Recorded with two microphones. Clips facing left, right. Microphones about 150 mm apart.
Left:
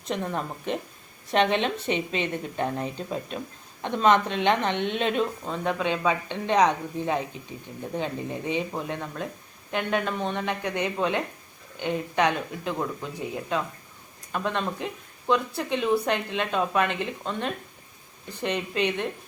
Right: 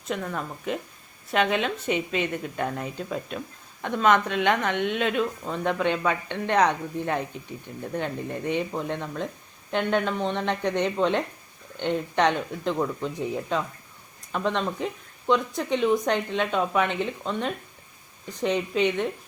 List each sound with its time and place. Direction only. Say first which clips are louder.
0.1 s speech: left 1 dB; 25° left (ahead or behind); by 17.5 s 5° left (ahead or behind)
18.5 s speech: right 3 dB; 10° left (ahead or behind)